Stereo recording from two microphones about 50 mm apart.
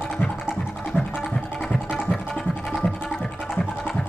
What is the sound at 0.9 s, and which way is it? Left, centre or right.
Music, left.